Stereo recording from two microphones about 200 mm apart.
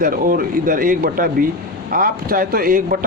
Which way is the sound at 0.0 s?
45° right (ahead or behind).